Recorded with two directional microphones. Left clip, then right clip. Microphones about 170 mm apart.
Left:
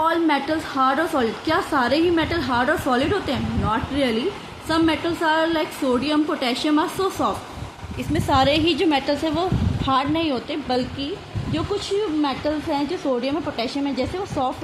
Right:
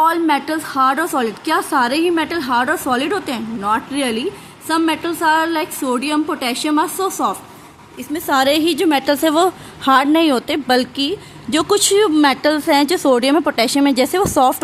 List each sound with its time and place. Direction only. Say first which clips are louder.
0.0 s a woman's voice: right 5 dB; 45° right (ahead or behind)